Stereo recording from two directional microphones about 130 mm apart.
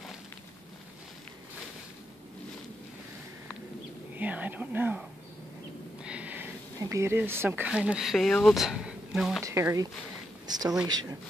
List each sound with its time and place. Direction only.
4.1 s speech: 10° right (ahead or behind)
6.0 s sniff: 10° right (ahead or behind)
6.8 s speech: 25° right (ahead or behind); by 9.4 s 5° right (ahead or behind)
9.4 s speech: 20° right (ahead or behind)